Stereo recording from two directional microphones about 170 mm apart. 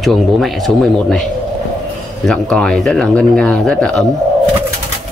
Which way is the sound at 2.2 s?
5° left (ahead or behind).